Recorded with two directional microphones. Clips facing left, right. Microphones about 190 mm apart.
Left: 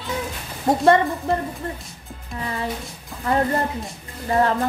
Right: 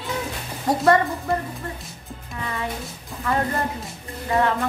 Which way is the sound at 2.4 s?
35° left (ahead or behind).